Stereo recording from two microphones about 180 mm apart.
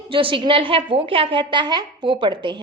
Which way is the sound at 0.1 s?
30° right (ahead or behind).